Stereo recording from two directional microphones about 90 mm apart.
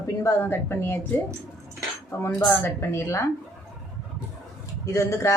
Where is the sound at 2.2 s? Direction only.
30° left (ahead or behind).